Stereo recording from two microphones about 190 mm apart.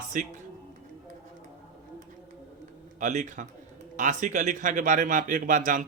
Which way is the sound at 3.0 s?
40° right (ahead or behind).